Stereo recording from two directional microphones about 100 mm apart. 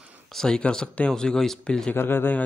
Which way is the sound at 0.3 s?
5° left (ahead or behind).